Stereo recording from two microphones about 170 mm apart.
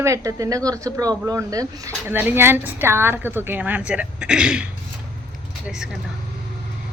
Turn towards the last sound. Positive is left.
turn(degrees=-5)  # may be behind; listen again after turning